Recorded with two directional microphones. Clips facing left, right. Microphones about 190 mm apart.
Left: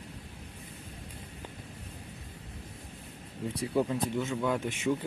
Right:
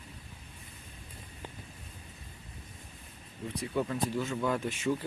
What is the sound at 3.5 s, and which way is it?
Speech, 30° left (ahead or behind).